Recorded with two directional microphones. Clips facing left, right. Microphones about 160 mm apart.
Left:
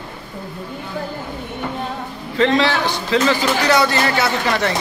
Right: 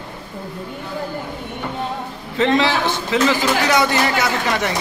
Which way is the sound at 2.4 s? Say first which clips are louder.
Left 1 dB; 20° right (ahead or behind).